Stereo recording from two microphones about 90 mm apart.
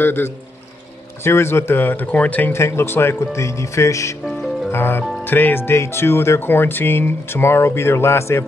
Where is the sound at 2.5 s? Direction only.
30° left (ahead or behind).